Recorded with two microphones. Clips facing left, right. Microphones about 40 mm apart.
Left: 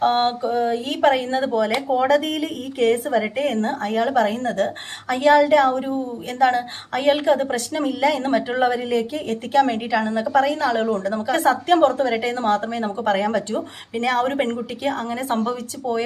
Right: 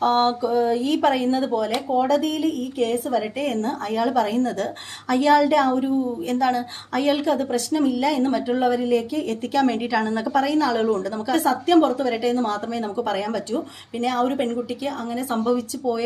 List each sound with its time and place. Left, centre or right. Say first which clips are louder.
0.0 s a sound: even; left
0.7 s a woman's voice: left 1 dB; left
1.5 s a woman's voice: left 2 dB; left
3.1 s a woman's voice: left 2 dB; left
9.6 s a sound: left 2 dB; left
10.0 s a woman's voice: left 1 dB; centre
10.3 s a woman's voice: left 1 dB; left
14.0 s a woman's voice: left 1 dB; left
15.5 s a woman's voice: even; left